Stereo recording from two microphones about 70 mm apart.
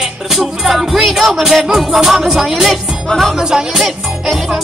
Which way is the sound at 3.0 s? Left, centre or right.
Centre.